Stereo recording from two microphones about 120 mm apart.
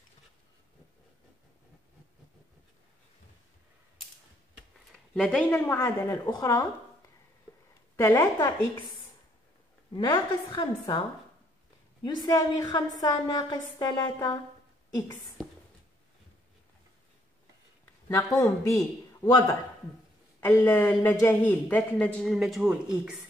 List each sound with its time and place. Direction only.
4.7 s a sound: 5° left (ahead or behind)
5.5 s a man's voice: 20° left (ahead or behind)
8.1 s a woman's voice: 30° left (ahead or behind)
9.9 s a woman's voice: 35° left (ahead or behind)
18.0 s a man's voice: 25° left (ahead or behind); by 22.3 s 10° left (ahead or behind)
22.3 s speech: centre (ahead or behind)